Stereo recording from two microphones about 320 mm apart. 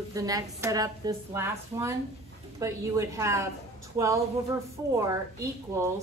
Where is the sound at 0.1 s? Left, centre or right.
Centre.